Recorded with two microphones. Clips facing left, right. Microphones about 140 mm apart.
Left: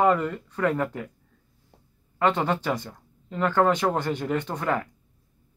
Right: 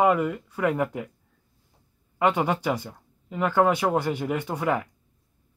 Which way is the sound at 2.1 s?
10° right (ahead or behind).